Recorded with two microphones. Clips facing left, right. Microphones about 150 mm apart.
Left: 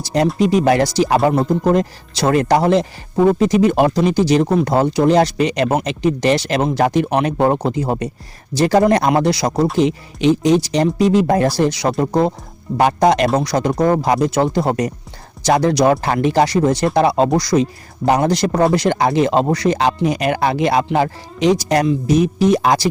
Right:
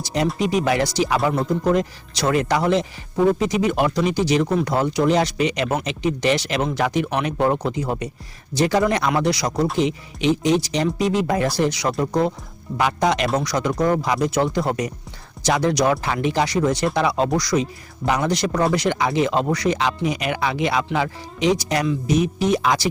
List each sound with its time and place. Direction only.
0.0 s speech: 40° left (ahead or behind)
1.2 s speech: 30° left (ahead or behind)
7.1 s speech: 45° left (ahead or behind); by 12.3 s 25° left (ahead or behind)
12.7 s speech: 45° left (ahead or behind)
13.3 s speech: 30° left (ahead or behind)
15.4 s speech: 35° left (ahead or behind)